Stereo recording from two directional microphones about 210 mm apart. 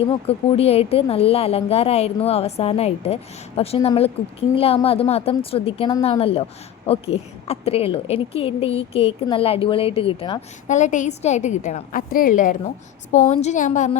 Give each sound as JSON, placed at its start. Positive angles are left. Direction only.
{"t": 0.0, "sound": "a woman's voice", "side_deg": 25}
{"t": 10.7, "sound": "a woman's voice", "side_deg": 35}